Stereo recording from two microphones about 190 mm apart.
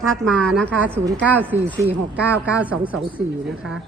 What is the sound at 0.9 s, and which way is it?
Speech, 15° right (ahead or behind).